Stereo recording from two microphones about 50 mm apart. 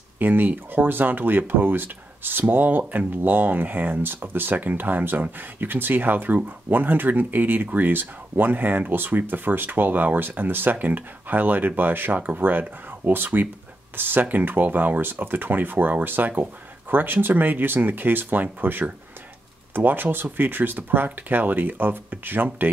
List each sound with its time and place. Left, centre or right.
0.2 s speech: right